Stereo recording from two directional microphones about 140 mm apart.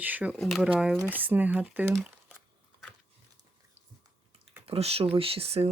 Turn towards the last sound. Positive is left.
turn(degrees=-45)  # may be behind; listen again after turning